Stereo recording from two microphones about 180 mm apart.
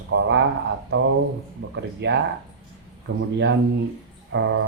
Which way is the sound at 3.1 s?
90° right.